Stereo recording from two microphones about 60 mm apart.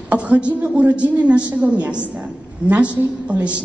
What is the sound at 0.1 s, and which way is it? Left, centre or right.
A woman's voice, centre.